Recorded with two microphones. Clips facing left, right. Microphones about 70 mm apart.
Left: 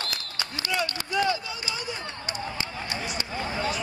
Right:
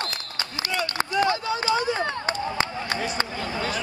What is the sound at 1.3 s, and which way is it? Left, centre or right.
Run, right.